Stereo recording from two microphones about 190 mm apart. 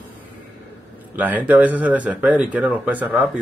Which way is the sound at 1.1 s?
10° right (ahead or behind).